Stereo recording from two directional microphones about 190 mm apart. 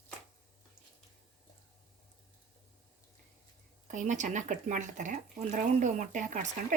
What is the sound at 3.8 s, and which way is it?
Speech, 40° right (ahead or behind).